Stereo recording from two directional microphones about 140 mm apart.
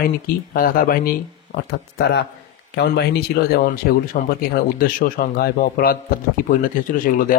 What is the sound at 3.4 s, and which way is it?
A man's voice, 90° left.